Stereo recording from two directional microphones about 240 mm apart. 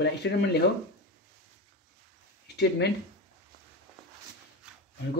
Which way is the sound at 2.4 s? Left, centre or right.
Left.